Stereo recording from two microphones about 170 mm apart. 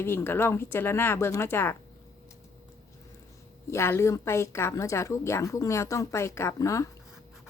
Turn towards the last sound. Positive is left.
turn(degrees=20)  # may be behind; listen again after turning